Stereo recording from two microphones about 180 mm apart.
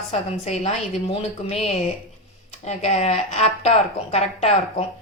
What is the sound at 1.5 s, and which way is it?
A woman's voice, 35° left (ahead or behind).